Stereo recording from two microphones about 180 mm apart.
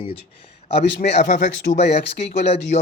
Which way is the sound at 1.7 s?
55° left (ahead or behind).